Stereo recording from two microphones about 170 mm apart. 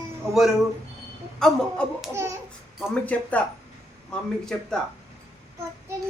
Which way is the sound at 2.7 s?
5° left (ahead or behind).